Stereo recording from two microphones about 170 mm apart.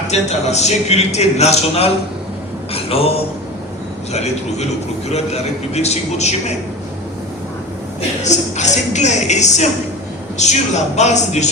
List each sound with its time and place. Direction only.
0.1 s a man's voice: 40° left (ahead or behind)
8.2 s speech: 45° left (ahead or behind)